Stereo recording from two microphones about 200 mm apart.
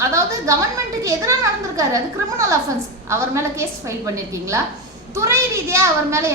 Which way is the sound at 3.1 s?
15° right (ahead or behind).